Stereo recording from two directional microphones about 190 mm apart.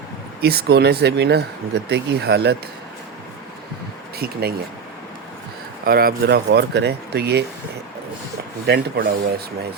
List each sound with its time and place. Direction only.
0.4 s speech: 60° right (ahead or behind)
4.2 s speech: 55° right (ahead or behind)
5.8 s speech: 50° right (ahead or behind)
8.6 s speech: 60° right (ahead or behind)